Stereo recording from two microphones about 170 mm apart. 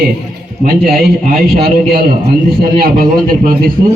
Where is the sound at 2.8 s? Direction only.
60° right (ahead or behind).